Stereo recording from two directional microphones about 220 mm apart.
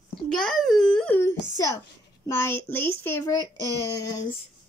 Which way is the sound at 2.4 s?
10° left (ahead or behind).